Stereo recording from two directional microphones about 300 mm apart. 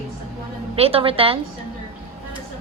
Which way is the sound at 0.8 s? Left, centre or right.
Centre.